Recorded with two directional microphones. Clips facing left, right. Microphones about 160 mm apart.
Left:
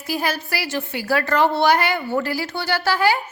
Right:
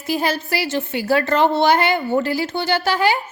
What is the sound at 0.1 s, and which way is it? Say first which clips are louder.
A woman's voice: right 3 dB; 25° right (ahead or behind).